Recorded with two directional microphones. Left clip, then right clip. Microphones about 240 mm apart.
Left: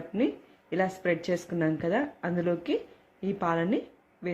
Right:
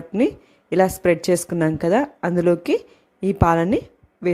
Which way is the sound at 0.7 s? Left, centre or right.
Right.